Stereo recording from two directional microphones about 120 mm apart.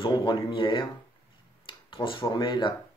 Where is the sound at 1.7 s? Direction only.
45° left (ahead or behind).